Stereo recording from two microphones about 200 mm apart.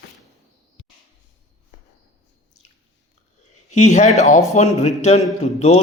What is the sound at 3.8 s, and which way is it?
A man's voice, 35° left (ahead or behind).